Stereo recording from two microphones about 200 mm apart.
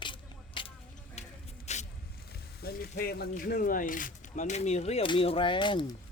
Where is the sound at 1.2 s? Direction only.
35° left (ahead or behind).